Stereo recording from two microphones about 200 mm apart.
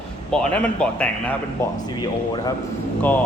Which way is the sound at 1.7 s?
20° left (ahead or behind).